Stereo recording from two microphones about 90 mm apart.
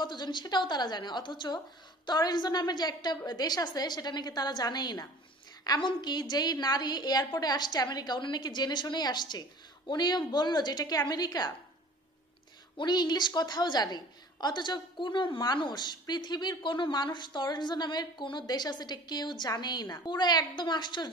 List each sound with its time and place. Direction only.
0.0 s a woman's voice: 55° left (ahead or behind)
5.8 s a woman's voice: 60° left (ahead or behind)
12.7 s a woman's voice: 55° left (ahead or behind)